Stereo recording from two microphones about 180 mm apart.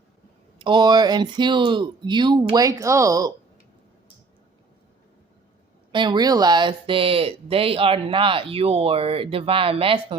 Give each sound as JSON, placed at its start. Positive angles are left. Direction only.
{"t": 0.6, "sound": "speech", "side_deg": -25}
{"t": 5.9, "sound": "speech", "side_deg": -25}